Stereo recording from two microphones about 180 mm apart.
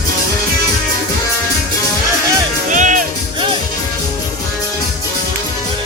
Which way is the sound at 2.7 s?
45° right (ahead or behind).